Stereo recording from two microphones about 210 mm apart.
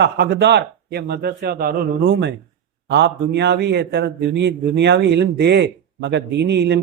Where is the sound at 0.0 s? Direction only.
50° right (ahead or behind).